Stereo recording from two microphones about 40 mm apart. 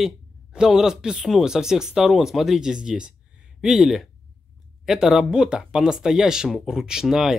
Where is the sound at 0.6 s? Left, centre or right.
Centre.